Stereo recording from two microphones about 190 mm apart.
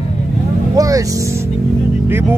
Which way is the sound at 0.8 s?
15° right (ahead or behind).